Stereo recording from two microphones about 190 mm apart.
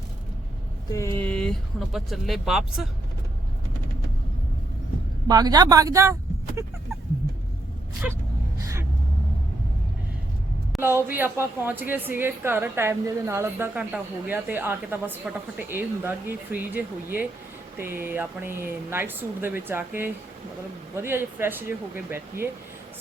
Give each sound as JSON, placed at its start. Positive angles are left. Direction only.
{"t": 0.9, "sound": "speech", "side_deg": 15}
{"t": 5.3, "sound": "a woman's voice", "side_deg": -20}
{"t": 8.0, "sound": "speech", "side_deg": -5}
{"t": 8.6, "sound": "vehicle", "side_deg": -15}
{"t": 10.8, "sound": "a woman's voice", "side_deg": -10}